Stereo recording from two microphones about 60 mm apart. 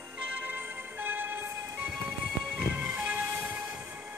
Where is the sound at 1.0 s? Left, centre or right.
Right.